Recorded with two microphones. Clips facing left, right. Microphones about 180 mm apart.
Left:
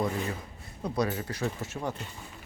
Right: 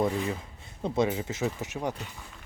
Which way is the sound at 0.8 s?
25° right (ahead or behind).